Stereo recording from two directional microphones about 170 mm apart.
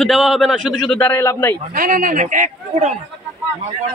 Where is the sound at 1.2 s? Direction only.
15° left (ahead or behind).